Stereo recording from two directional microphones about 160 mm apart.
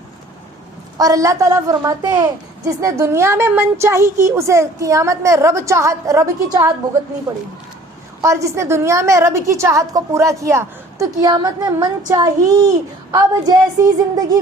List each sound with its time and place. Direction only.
0.9 s a woman's voice: 20° right (ahead or behind)
8.2 s a woman's voice: 20° right (ahead or behind)